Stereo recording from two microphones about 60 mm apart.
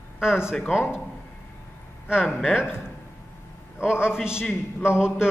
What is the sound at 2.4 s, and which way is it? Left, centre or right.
Speech, centre.